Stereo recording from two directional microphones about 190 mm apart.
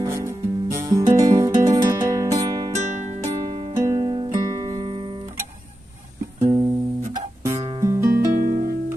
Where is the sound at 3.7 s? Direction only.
15° right (ahead or behind).